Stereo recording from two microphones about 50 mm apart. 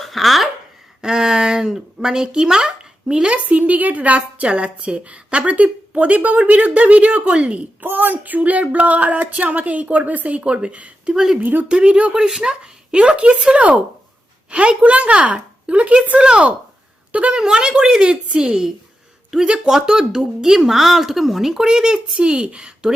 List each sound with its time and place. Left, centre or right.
0.0 s a sound: centre
1.0 s speech: centre
7.9 s speech: right
11.1 s speech: centre
11.3 s speech: right
11.7 s a woman's voice: right
17.3 s speech: centre